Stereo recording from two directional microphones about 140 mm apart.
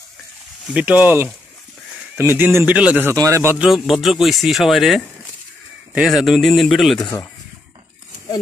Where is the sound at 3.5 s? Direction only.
5° right (ahead or behind).